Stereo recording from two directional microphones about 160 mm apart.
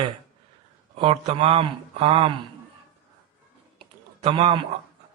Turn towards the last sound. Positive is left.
turn(degrees=-40)  # may be behind; listen again after turning